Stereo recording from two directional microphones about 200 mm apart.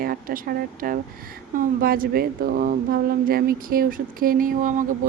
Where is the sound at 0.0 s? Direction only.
45° right (ahead or behind).